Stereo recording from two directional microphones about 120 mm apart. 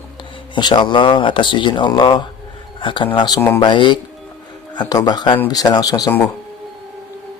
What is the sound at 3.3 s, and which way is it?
Speech, 20° left (ahead or behind).